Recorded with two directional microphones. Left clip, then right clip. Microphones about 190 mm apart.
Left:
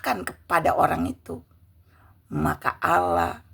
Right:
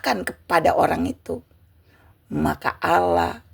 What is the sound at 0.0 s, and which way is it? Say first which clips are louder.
A woman's voice: right 3 dB; 15° right (ahead or behind).